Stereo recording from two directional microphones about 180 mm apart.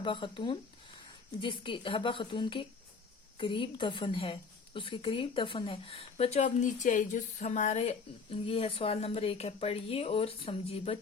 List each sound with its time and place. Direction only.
0.0 s a woman's voice: 25° left (ahead or behind)